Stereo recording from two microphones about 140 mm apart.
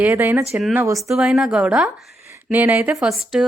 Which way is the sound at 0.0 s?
15° right (ahead or behind).